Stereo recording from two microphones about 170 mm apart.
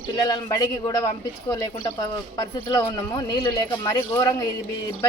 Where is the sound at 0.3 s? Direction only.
25° left (ahead or behind).